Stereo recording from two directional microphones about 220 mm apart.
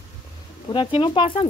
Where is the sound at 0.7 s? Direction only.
25° left (ahead or behind).